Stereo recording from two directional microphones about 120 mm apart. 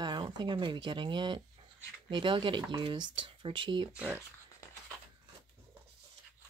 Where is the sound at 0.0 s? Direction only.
40° right (ahead or behind).